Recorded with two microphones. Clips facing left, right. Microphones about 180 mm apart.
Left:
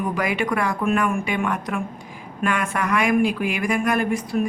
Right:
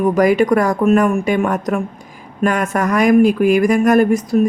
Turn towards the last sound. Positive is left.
turn(degrees=-40)  # may be behind; listen again after turning